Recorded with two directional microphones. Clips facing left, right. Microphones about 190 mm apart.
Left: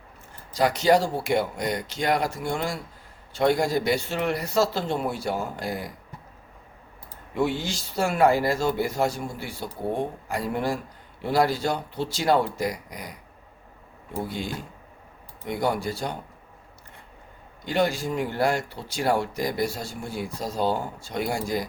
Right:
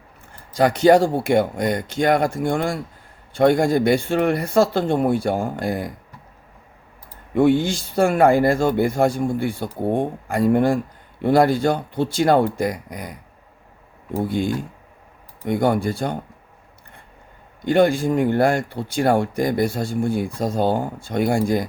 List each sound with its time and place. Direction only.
0.5 s speech: 55° right (ahead or behind)
7.3 s speech: 55° right (ahead or behind)
14.3 s speech: 55° right (ahead or behind)
17.7 s speech: 55° right (ahead or behind)